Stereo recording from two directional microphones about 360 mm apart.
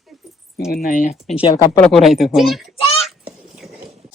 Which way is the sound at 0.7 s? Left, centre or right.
Left.